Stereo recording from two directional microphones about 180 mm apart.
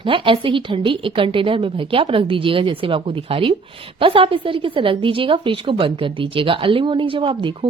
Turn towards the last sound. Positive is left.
turn(degrees=-30)  # may be behind; listen again after turning